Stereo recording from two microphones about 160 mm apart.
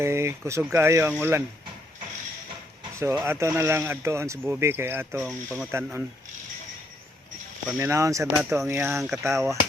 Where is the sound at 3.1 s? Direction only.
15° right (ahead or behind).